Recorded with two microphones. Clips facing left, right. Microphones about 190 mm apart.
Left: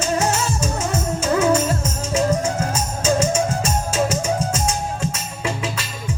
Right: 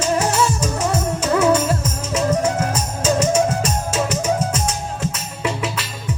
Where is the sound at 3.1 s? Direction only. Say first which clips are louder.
Right 2 dB; 30° left (ahead or behind).